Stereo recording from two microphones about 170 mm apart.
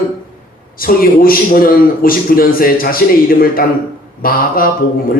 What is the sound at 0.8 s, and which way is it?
A man's voice, 60° left (ahead or behind).